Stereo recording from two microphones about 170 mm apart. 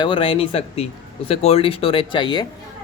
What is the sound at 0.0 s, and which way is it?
Speech, 30° left (ahead or behind).